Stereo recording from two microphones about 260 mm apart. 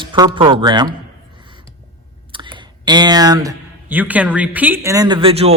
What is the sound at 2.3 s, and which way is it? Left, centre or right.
Speech, centre.